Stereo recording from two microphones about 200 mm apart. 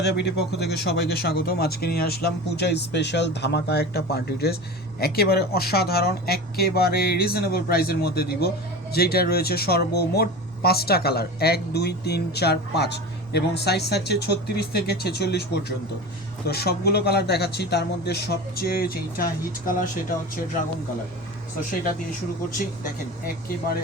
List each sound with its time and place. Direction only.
0.0 s speech: 55° left (ahead or behind)
16.5 s speech: 55° left (ahead or behind)